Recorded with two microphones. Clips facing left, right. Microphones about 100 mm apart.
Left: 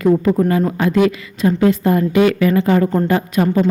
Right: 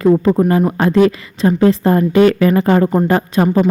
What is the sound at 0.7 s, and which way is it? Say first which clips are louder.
A woman's voice: right 3 dB; 35° right (ahead or behind).